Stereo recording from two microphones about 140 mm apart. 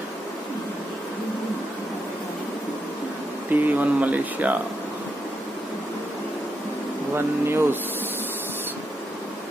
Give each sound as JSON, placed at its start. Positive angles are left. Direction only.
{"t": 3.4, "sound": "speech", "side_deg": -10}
{"t": 7.2, "sound": "speech", "side_deg": -15}